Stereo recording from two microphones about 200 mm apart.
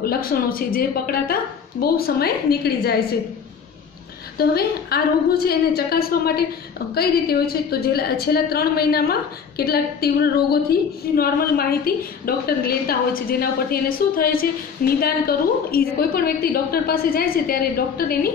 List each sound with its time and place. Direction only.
0.0 s a woman's voice: 50° left (ahead or behind)
4.4 s a woman's voice: 50° left (ahead or behind)